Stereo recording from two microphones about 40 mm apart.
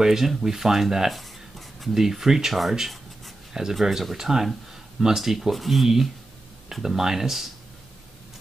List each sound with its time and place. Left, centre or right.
0.0 s speech: centre
3.8 s speech: centre